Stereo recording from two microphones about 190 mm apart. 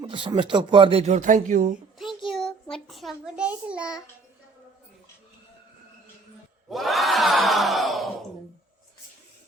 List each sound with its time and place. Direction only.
0.0 s speech: 25° right (ahead or behind); by 1.7 s 45° right (ahead or behind)
2.3 s a child's voice: 5° left (ahead or behind)
6.7 s crowd: centre (ahead or behind)